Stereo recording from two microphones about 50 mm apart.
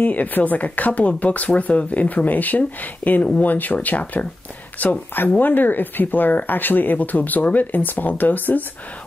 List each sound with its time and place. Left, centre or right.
0.0 s speech: left